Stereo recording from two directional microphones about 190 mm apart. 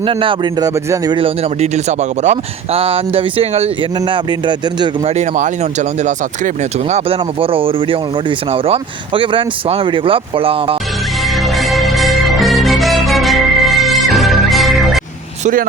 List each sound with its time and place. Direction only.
0.0 s a man's voice: 25° right (ahead or behind)
5.1 s speech: 35° right (ahead or behind)
6.9 s a man's voice: 30° right (ahead or behind)
11.5 s music: centre (ahead or behind)